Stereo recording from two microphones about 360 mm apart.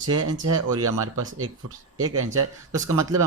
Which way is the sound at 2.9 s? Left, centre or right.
Centre.